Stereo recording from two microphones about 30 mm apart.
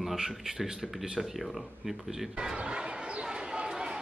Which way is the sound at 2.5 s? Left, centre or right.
Right.